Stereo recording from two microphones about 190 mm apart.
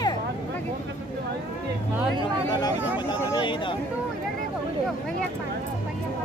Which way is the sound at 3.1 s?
25° left (ahead or behind).